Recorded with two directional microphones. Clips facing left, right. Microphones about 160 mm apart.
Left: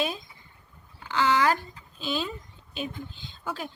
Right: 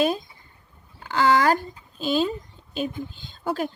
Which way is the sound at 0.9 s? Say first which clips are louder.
Right 4 dB; 45° right (ahead or behind).